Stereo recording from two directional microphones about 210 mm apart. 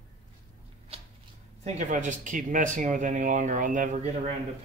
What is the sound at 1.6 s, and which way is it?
Speech, 35° right (ahead or behind).